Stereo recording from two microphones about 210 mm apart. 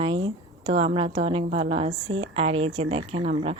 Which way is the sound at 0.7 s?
30° right (ahead or behind).